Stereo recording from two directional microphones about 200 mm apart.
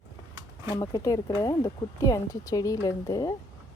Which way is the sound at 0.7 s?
15° left (ahead or behind).